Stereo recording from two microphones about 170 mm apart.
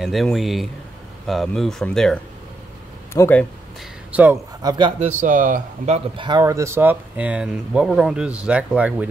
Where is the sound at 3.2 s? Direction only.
10° left (ahead or behind).